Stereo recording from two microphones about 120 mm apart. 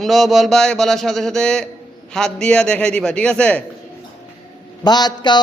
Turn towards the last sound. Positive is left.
turn(degrees=35)  # may be behind; listen again after turning